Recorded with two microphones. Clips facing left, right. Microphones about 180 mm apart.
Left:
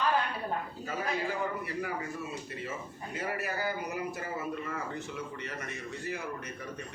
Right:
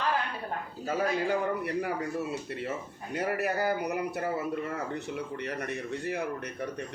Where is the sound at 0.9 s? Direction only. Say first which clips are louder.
Right 6 dB; 65° right (ahead or behind).